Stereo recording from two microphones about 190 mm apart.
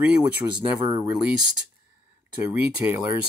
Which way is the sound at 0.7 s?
20° right (ahead or behind).